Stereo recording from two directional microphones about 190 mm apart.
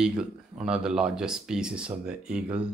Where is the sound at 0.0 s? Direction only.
5° right (ahead or behind).